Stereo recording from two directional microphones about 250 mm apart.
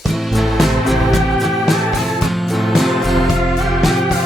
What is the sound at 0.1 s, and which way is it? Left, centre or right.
Music, centre.